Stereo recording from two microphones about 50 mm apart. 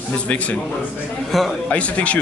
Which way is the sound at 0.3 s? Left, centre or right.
Left.